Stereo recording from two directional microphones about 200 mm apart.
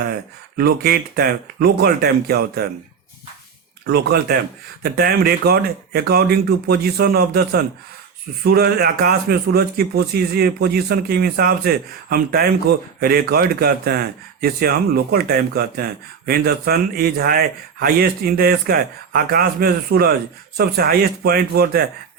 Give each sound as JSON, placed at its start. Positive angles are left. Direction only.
{"t": 0.0, "sound": "speech", "side_deg": -50}
{"t": 3.8, "sound": "speech", "side_deg": -55}